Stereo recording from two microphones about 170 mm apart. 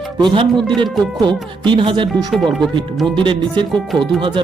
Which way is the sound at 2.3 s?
Centre (ahead or behind).